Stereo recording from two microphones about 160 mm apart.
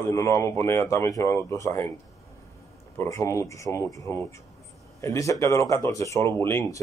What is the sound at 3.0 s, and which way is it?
Speech, 20° left (ahead or behind).